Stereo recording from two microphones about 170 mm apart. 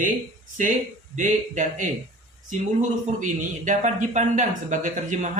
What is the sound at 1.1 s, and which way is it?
Speech, 45° right (ahead or behind).